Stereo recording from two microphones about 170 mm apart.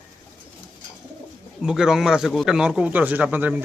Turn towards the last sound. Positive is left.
turn(degrees=-10)  # may be behind; listen again after turning